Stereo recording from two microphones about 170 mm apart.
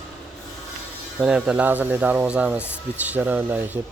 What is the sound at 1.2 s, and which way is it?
Speech, 5° right (ahead or behind).